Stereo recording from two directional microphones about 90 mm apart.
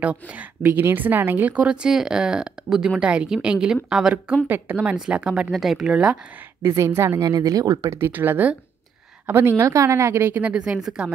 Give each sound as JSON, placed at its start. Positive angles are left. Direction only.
{"t": 0.0, "sound": "a woman's voice", "side_deg": -15}
{"t": 6.8, "sound": "speech", "side_deg": -30}
{"t": 7.2, "sound": "speech", "side_deg": -45}
{"t": 7.9, "sound": "a woman's voice", "side_deg": -25}